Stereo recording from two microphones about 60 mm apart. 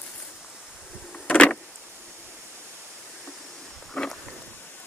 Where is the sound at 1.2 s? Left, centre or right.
Left.